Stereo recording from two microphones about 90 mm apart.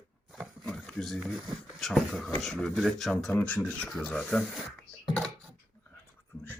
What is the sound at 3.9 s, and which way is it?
Speech, centre (ahead or behind).